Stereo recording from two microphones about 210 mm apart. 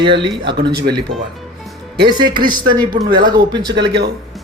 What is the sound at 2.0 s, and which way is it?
Speech, 20° right (ahead or behind).